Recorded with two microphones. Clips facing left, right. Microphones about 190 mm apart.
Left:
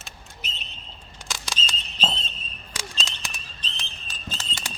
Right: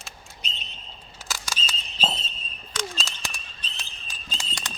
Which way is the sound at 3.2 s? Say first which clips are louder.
Right 1 dB; 5° right (ahead or behind).